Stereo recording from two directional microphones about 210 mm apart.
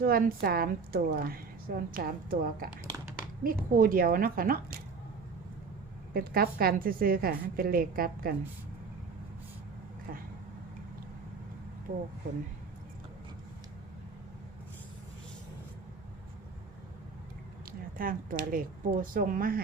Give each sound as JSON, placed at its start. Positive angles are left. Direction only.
{"t": 0.0, "sound": "a woman's voice", "side_deg": -45}
{"t": 6.1, "sound": "a woman's voice", "side_deg": -45}
{"t": 17.7, "sound": "speech", "side_deg": -40}